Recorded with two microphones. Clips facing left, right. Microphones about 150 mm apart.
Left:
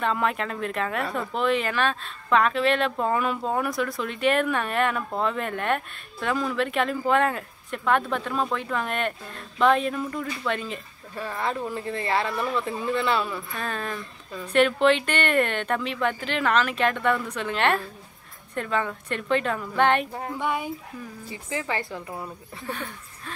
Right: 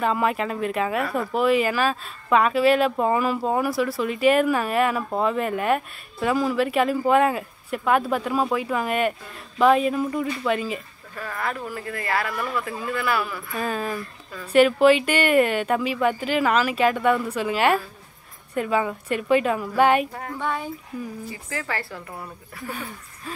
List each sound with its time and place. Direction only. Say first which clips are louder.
0.0 s speech: right 3 dB; 5° right (ahead or behind)
11.1 s speech: left 1 dB; 25° left (ahead or behind)
13.6 s speech: right 7 dB; 5° right (ahead or behind)
20.2 s speech: even; 15° left (ahead or behind)
22.7 s speech: even; 5° right (ahead or behind)